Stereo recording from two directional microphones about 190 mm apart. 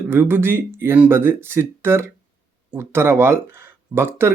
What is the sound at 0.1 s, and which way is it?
Speech, 10° right (ahead or behind).